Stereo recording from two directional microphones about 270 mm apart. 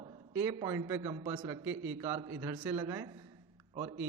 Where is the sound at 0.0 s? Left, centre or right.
Centre.